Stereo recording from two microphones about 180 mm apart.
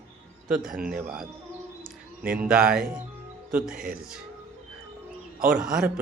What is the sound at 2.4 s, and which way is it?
Speech, 5° right (ahead or behind).